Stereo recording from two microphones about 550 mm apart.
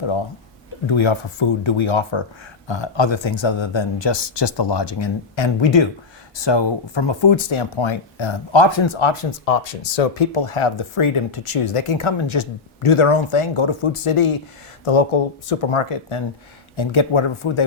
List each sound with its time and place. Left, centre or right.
0.0 s speech: left
14.8 s speech: left